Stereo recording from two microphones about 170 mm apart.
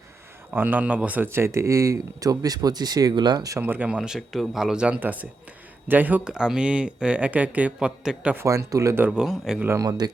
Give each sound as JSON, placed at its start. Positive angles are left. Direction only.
{"t": 0.5, "sound": "speech", "side_deg": -10}
{"t": 9.6, "sound": "speech", "side_deg": -20}